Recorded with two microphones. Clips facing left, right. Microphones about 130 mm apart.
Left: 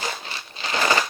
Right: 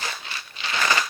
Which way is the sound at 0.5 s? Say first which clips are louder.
Left 3 dB; 35° left (ahead or behind).